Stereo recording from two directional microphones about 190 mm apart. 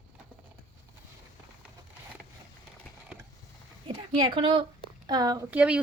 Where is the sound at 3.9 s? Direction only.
25° right (ahead or behind).